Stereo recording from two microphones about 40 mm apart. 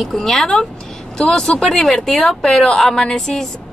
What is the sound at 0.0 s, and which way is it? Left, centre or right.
Speech, centre.